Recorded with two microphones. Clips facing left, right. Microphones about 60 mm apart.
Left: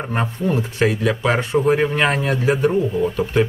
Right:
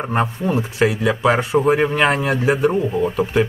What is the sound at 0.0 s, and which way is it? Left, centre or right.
Speech, centre.